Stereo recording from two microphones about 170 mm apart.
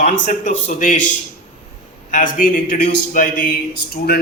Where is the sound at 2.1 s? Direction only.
50° left (ahead or behind).